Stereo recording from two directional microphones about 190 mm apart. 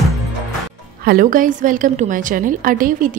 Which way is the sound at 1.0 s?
45° right (ahead or behind).